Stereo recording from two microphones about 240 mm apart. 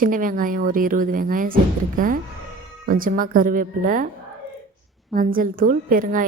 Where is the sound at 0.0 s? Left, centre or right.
Right.